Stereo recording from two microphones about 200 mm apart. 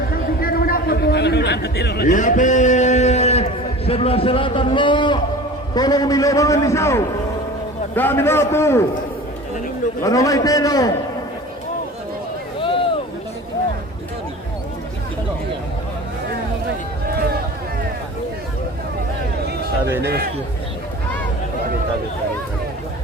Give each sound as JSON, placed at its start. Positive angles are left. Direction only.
{"t": 0.4, "sound": "a sound", "side_deg": 45}
{"t": 3.8, "sound": "a man's voice", "side_deg": 30}
{"t": 10.0, "sound": "a man's voice", "side_deg": 15}
{"t": 20.0, "sound": "a man's voice", "side_deg": -55}